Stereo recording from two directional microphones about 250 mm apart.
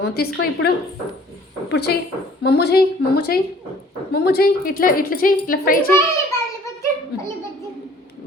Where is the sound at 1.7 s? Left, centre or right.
Left.